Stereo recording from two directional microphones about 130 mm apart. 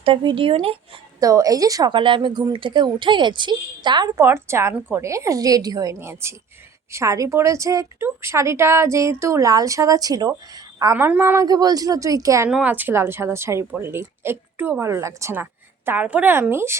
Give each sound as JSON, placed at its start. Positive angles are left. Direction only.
{"t": 0.0, "sound": "a woman's voice", "side_deg": -40}
{"t": 1.2, "sound": "a woman's voice", "side_deg": -25}
{"t": 1.9, "sound": "a woman's voice", "side_deg": -40}
{"t": 4.2, "sound": "a woman's voice", "side_deg": -20}
{"t": 10.9, "sound": "speech", "side_deg": -15}
{"t": 11.4, "sound": "a woman's voice", "side_deg": -30}
{"t": 12.5, "sound": "a woman's voice", "side_deg": -10}